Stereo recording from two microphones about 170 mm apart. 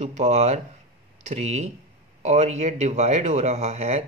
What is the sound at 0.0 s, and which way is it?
Speech, 40° right (ahead or behind).